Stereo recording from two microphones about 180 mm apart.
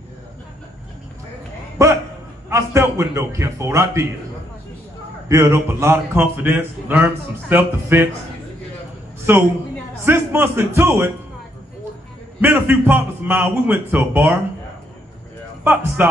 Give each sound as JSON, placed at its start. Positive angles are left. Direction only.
{"t": 1.8, "sound": "bow-wow", "side_deg": -15}
{"t": 2.5, "sound": "speech", "side_deg": -15}
{"t": 5.3, "sound": "speech", "side_deg": -15}
{"t": 9.3, "sound": "speech", "side_deg": -15}
{"t": 12.4, "sound": "speech", "side_deg": -10}
{"t": 15.6, "sound": "speech", "side_deg": -10}